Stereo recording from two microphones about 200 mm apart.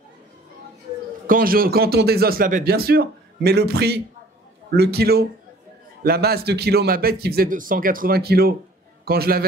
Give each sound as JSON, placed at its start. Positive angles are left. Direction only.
{"t": 1.2, "sound": "speech", "side_deg": -45}